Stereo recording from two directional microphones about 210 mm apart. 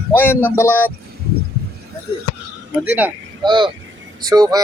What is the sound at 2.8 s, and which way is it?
Speech, 10° right (ahead or behind).